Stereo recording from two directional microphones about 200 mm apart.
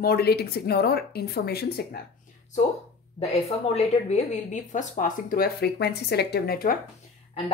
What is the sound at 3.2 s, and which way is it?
A woman's voice, 30° left (ahead or behind).